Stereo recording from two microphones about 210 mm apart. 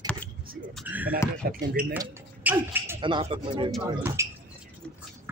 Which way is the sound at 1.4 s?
45° right (ahead or behind).